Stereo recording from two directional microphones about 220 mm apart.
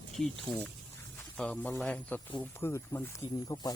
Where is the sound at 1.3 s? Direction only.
5° left (ahead or behind).